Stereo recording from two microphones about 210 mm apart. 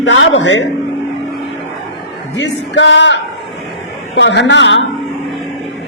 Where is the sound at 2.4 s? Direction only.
60° left (ahead or behind).